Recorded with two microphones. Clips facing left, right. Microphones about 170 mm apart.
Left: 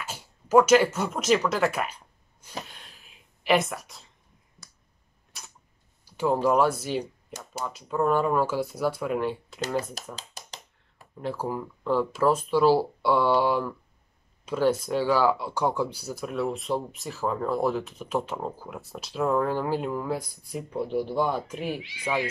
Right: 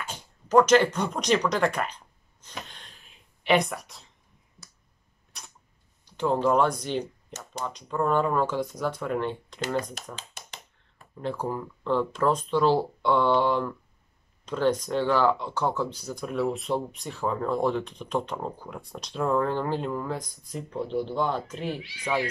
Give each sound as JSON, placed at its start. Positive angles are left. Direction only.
{"t": 0.0, "sound": "speech", "side_deg": 5}
{"t": 2.6, "sound": "a sound", "side_deg": 5}
{"t": 5.3, "sound": "camera", "side_deg": 0}
{"t": 6.0, "sound": "speech", "side_deg": 10}
{"t": 10.1, "sound": "a sound", "side_deg": 35}
{"t": 11.0, "sound": "speech", "side_deg": 5}